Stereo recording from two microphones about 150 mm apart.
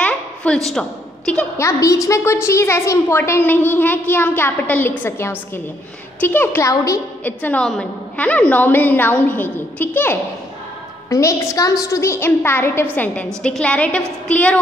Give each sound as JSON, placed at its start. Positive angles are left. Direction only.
{"t": 0.0, "sound": "a sound", "side_deg": 10}
{"t": 0.7, "sound": "a woman's voice", "side_deg": 5}
{"t": 1.6, "sound": "a woman's voice", "side_deg": 20}
{"t": 7.2, "sound": "a woman's voice", "side_deg": 10}